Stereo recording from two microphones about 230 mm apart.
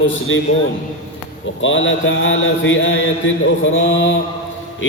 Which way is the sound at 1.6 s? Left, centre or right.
Left.